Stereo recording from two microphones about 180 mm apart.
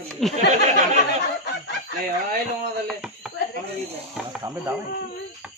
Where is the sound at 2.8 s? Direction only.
5° right (ahead or behind).